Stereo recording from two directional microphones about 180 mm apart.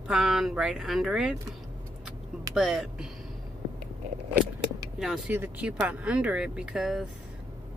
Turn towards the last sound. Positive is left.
turn(degrees=0)  # may be behind; listen again after turning